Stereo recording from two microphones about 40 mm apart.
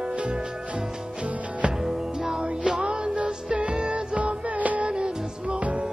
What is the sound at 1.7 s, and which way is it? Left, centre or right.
Music, centre.